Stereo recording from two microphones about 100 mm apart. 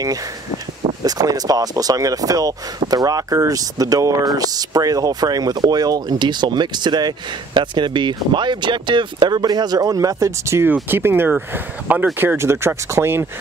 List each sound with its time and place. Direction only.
1.0 s speech: 40° right (ahead or behind)